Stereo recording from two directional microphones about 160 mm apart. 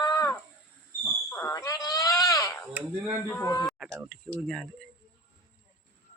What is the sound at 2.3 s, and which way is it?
Sheep, 20° left (ahead or behind).